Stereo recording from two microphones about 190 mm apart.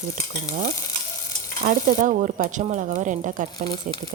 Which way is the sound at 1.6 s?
40° right (ahead or behind).